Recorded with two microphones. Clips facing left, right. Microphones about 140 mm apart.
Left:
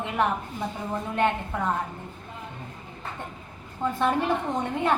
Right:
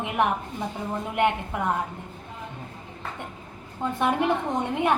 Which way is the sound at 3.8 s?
15° right (ahead or behind).